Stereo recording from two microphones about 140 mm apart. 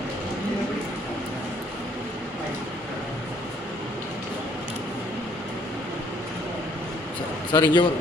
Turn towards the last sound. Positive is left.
turn(degrees=30)  # may be behind; listen again after turning